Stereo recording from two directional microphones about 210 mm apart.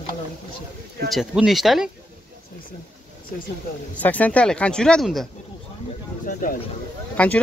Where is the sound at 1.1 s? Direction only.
Centre (ahead or behind).